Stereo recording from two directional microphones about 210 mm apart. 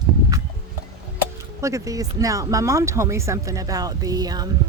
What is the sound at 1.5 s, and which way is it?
Speech, 15° right (ahead or behind).